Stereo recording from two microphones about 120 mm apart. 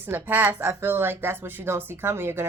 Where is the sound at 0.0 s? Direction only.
15° right (ahead or behind).